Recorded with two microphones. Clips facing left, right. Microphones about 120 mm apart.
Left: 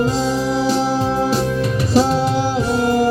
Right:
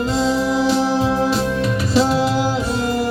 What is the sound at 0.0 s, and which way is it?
Music, 40° left (ahead or behind).